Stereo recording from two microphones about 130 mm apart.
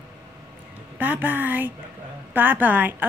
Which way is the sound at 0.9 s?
10° right (ahead or behind).